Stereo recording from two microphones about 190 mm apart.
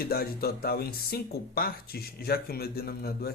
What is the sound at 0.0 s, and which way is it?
Speech, 50° left (ahead or behind).